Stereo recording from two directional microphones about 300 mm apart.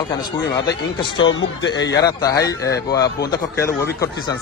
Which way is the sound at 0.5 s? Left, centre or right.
Centre.